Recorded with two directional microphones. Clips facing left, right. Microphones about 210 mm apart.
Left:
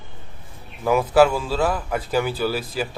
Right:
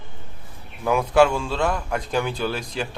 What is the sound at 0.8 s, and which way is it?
A man's voice, 5° left (ahead or behind).